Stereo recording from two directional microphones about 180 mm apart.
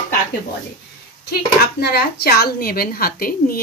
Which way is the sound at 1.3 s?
60° left (ahead or behind).